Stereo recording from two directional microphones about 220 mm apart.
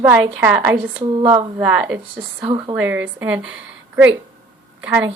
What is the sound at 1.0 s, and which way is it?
Speech, 20° right (ahead or behind).